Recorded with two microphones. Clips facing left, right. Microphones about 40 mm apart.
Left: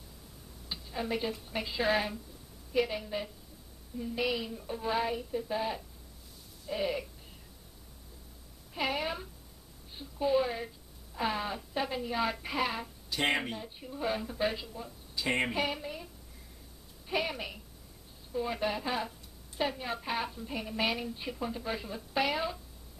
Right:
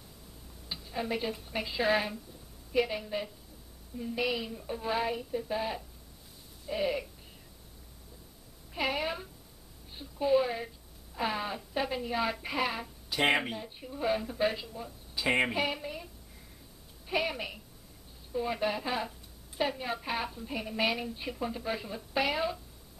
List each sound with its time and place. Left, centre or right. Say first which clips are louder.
0.7 s a woman's voice: right 1 dB; centre
8.7 s a woman's voice: right 1 dB; centre